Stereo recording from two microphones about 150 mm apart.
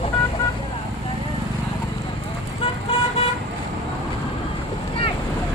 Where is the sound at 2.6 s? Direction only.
40° left (ahead or behind).